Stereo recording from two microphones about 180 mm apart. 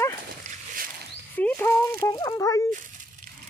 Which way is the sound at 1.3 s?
10° left (ahead or behind).